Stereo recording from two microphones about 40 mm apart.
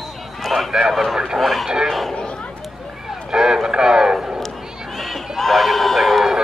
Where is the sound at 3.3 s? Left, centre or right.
Centre.